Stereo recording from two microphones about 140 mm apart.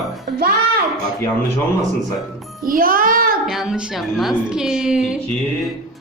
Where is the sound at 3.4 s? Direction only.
Centre (ahead or behind).